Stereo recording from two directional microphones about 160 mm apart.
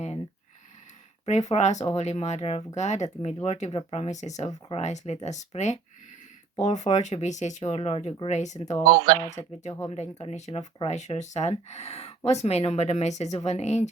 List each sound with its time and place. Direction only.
1.2 s speech: 45° left (ahead or behind)
8.8 s speech: 25° right (ahead or behind)
9.9 s speech: 45° left (ahead or behind)